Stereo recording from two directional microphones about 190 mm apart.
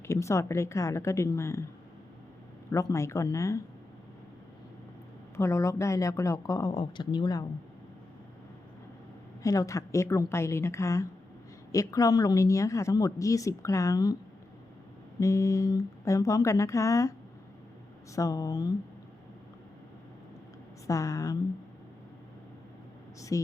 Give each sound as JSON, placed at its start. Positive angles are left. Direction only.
{"t": 0.1, "sound": "a woman's voice", "side_deg": 15}
{"t": 2.6, "sound": "a woman's voice", "side_deg": 15}
{"t": 5.4, "sound": "a woman's voice", "side_deg": 15}
{"t": 9.4, "sound": "a woman's voice", "side_deg": 15}
{"t": 15.2, "sound": "a woman's voice", "side_deg": 15}
{"t": 20.8, "sound": "a woman's voice", "side_deg": 15}
{"t": 23.3, "sound": "a woman's voice", "side_deg": 15}